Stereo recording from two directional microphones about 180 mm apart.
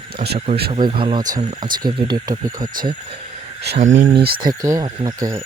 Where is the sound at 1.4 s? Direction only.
35° right (ahead or behind).